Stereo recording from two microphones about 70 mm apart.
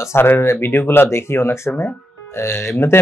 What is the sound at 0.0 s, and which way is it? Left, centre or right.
Speech, left.